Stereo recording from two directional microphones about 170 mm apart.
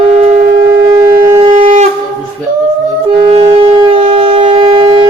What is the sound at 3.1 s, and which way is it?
Shofar, 35° right (ahead or behind).